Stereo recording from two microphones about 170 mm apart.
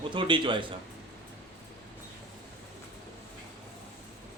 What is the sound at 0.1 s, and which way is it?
Speech, 30° right (ahead or behind).